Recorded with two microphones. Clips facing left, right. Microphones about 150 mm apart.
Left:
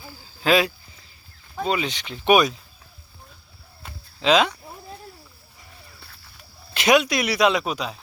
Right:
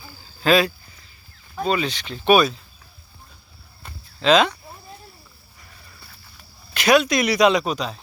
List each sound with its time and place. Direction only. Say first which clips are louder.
0.4 s speech: right 2 dB; 15° left (ahead or behind)
3.8 s a sound: right 2 dB; 10° left (ahead or behind)
6.7 s speech: right 1 dB; 20° left (ahead or behind)
7.0 s speech: right 3 dB; 5° left (ahead or behind)